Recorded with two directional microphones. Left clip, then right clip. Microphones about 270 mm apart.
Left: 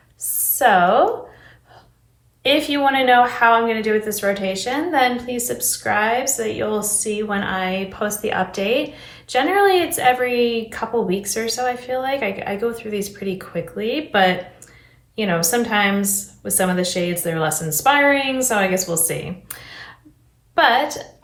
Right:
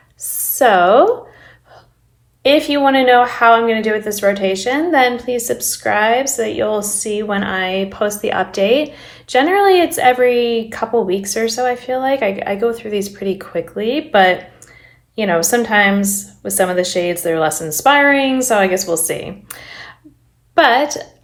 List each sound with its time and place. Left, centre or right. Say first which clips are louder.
0.6 s a woman's voice: right 4 dB; right
2.4 s a woman's voice: right 5 dB; right